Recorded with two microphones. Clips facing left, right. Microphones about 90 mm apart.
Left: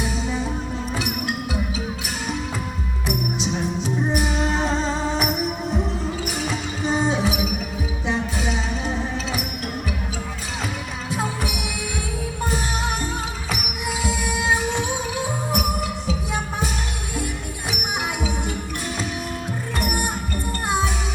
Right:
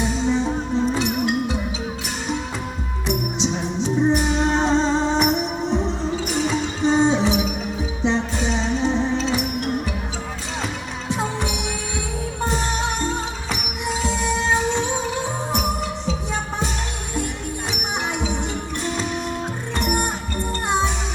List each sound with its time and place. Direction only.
0.0 s music: 5° left (ahead or behind)
0.4 s music: 30° right (ahead or behind)
0.9 s music: 5° left (ahead or behind)
3.1 s music: 5° left (ahead or behind)
11.1 s music: 5° left (ahead or behind)
19.8 s music: 5° left (ahead or behind)